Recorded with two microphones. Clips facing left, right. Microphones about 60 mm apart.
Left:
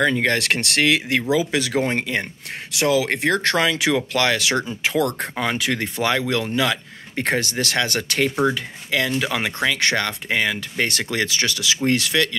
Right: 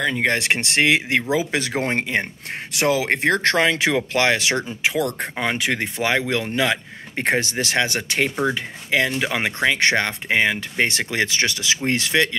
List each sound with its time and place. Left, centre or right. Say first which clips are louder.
0.1 s speech: even; centre